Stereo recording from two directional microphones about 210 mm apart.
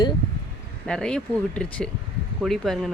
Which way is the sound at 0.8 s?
5° left (ahead or behind).